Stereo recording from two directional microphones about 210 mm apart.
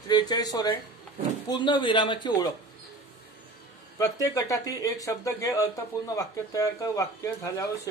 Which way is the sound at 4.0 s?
15° left (ahead or behind).